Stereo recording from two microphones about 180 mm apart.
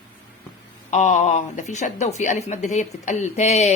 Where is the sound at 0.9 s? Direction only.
40° left (ahead or behind).